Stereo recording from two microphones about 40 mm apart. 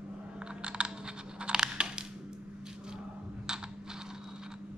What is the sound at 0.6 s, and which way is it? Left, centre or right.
Computer keyboard, right.